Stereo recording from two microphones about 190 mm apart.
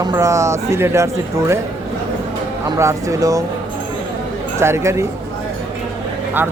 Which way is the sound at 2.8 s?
15° right (ahead or behind).